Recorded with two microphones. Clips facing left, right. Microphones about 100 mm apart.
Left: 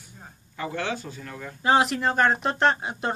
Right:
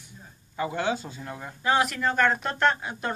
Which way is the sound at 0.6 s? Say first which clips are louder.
Right 2 dB; 15° right (ahead or behind).